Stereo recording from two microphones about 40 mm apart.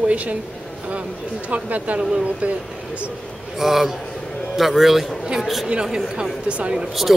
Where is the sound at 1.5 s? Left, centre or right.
Right.